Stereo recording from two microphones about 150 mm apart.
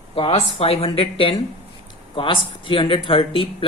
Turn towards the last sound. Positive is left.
turn(degrees=35)  # may be behind; listen again after turning